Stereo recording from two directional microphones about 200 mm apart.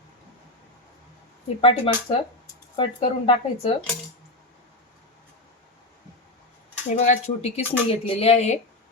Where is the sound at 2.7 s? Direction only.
30° left (ahead or behind).